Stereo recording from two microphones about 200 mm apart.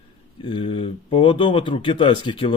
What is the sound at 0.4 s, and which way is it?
Speech, 25° left (ahead or behind).